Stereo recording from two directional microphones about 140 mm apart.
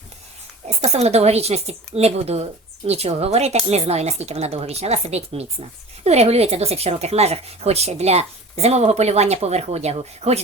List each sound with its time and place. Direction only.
0.7 s speech: 50° right (ahead or behind)